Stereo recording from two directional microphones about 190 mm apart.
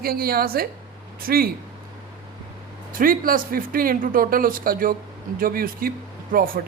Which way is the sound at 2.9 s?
50° right (ahead or behind).